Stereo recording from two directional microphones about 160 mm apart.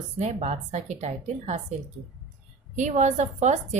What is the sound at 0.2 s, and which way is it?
Speech, 45° right (ahead or behind).